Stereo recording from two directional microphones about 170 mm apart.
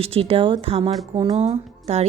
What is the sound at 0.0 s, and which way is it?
A woman's voice, 35° right (ahead or behind).